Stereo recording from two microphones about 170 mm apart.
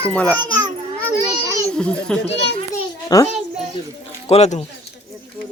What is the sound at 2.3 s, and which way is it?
Speech, 90° left.